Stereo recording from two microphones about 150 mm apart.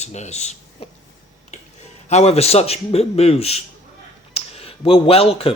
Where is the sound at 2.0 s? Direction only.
45° left (ahead or behind).